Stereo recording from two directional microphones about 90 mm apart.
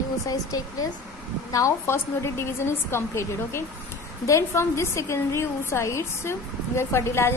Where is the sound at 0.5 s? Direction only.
40° left (ahead or behind).